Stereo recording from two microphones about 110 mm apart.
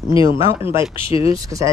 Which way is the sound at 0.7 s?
50° left (ahead or behind).